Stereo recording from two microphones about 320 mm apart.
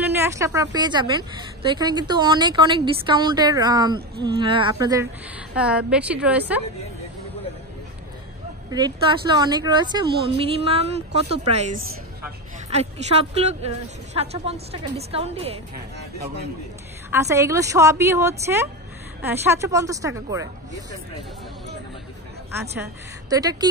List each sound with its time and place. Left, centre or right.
0.0 s a woman's voice: centre
8.6 s a woman's voice: centre
12.6 s a woman's voice: centre
17.1 s a woman's voice: centre
22.5 s a woman's voice: centre